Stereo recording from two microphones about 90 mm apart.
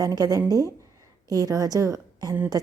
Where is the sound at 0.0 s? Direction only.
45° right (ahead or behind).